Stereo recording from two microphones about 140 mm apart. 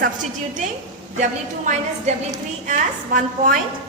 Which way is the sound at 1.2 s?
60° right (ahead or behind).